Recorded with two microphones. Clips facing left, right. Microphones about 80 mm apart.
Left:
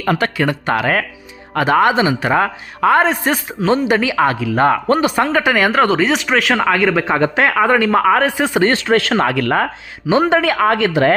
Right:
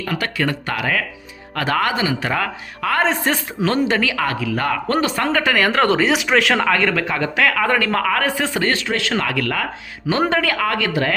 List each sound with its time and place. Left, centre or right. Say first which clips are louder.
0.2 s speech: left 4 dB; left
3.1 s speech: left 2 dB; centre; by 4.9 s left
4.9 s speech: left 4 dB; centre
6.9 s speech: left 5 dB; left
8.9 s speech: left 7 dB; left
10.1 s speech: left 5 dB; centre